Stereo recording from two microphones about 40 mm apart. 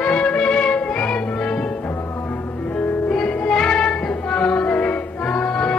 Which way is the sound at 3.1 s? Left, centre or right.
Left.